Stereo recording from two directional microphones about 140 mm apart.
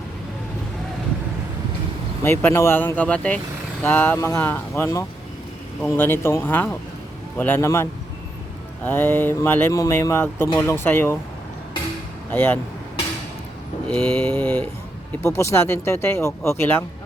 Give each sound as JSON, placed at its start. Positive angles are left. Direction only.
{"t": 2.2, "sound": "speech", "side_deg": 15}
{"t": 12.3, "sound": "speech", "side_deg": 15}
{"t": 13.8, "sound": "speech", "side_deg": 5}
{"t": 15.2, "sound": "speech", "side_deg": 20}